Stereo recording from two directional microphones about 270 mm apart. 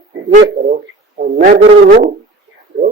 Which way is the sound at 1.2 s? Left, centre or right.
Right.